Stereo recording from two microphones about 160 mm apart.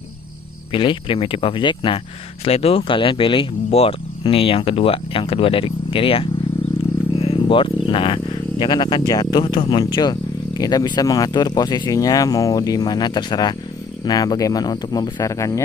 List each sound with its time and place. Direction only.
0.7 s speech: 30° left (ahead or behind)